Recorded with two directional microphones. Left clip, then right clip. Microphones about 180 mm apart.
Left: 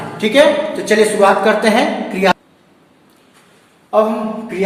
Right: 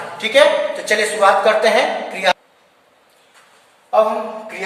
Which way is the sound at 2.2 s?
15° left (ahead or behind).